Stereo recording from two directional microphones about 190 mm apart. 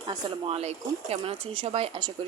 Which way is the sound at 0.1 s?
30° right (ahead or behind).